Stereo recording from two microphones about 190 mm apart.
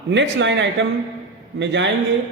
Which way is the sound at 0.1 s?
70° right (ahead or behind).